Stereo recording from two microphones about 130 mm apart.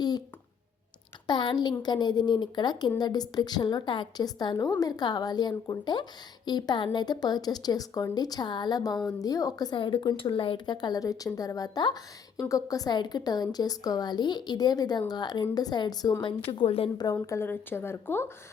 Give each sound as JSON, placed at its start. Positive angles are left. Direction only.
{"t": 1.3, "sound": "a woman's voice", "side_deg": 35}
{"t": 16.5, "sound": "a woman's voice", "side_deg": 45}
{"t": 17.0, "sound": "speech", "side_deg": 25}